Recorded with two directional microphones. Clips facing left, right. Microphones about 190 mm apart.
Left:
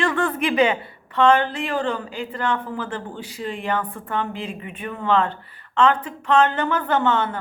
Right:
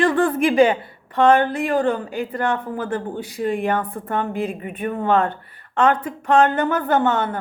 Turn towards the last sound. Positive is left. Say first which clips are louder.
# right 2 dB
turn(degrees=-50)  # may be behind; listen again after turning